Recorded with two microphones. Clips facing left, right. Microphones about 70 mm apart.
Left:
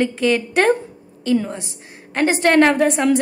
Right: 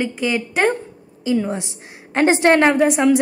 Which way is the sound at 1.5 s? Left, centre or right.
Right.